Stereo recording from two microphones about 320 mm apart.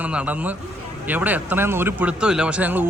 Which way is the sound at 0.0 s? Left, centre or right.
Centre.